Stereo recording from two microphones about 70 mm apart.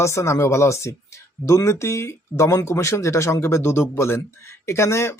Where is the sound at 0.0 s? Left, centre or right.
Left.